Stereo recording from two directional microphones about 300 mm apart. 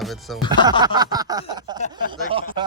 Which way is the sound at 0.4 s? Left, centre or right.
Centre.